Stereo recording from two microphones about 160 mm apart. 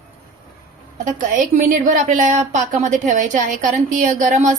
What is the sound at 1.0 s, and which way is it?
A woman's voice, 50° right (ahead or behind).